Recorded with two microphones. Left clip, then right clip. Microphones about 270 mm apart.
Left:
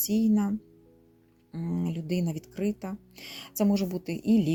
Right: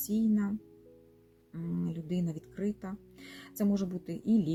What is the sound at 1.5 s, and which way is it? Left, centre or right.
Speech, left.